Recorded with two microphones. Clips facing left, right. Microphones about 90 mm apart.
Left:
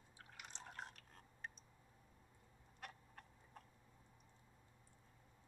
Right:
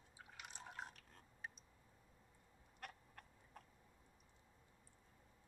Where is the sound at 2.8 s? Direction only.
Centre (ahead or behind).